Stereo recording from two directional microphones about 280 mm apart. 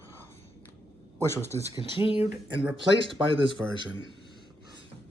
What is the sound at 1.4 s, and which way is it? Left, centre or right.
Speech, centre.